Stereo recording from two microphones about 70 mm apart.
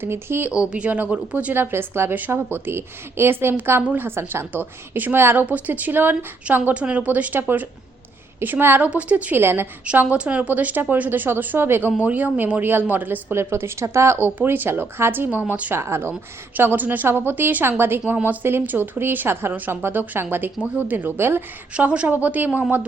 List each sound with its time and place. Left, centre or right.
0.0 s a woman's voice: right
0.5 s a woman's voice: centre
1.5 s a woman's voice: right
8.8 s a woman's voice: centre
9.4 s a woman's voice: right
9.8 s a woman's voice: right
11.9 s a woman's voice: centre
13.3 s a woman's voice: right
14.3 s a woman's voice: right
15.3 s a woman's voice: right
15.7 s a woman's voice: right
21.8 s a woman's voice: centre